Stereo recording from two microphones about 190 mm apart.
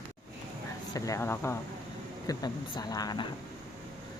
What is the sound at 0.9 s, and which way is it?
A woman's voice, 15° left (ahead or behind).